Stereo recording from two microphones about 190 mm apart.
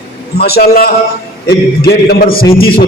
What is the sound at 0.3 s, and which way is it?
A man's voice, 55° left (ahead or behind).